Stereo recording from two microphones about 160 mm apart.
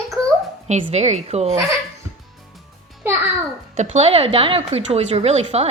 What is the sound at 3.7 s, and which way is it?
Speech, 45° right (ahead or behind).